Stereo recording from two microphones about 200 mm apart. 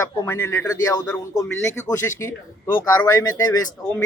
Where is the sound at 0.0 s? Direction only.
15° left (ahead or behind).